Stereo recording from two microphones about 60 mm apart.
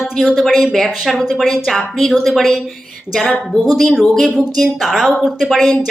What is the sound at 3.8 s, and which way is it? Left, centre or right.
A woman's voice, centre.